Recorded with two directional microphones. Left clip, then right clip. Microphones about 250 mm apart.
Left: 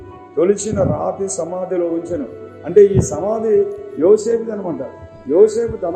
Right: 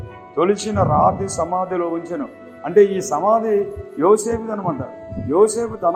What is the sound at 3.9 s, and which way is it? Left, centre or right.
Speech, centre.